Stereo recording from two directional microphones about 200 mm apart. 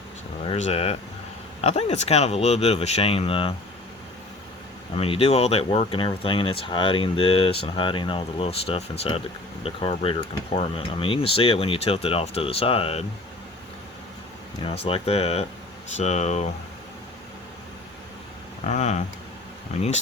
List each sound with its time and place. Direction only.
0.4 s speech: 30° left (ahead or behind)
4.9 s speech: 30° left (ahead or behind)
14.6 s speech: 30° left (ahead or behind)
18.7 s speech: 35° left (ahead or behind)